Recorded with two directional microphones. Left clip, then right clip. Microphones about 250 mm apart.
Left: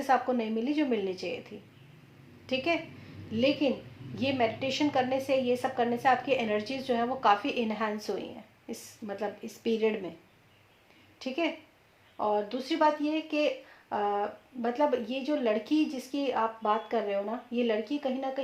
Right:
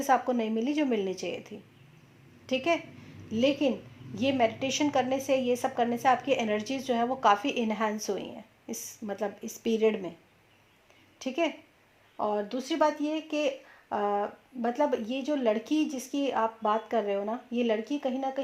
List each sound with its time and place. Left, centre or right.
0.0 s speech: right
11.2 s speech: right